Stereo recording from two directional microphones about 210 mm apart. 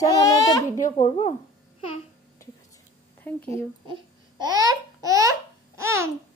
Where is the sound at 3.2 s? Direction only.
10° left (ahead or behind).